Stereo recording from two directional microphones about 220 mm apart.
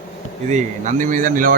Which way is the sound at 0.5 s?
35° right (ahead or behind).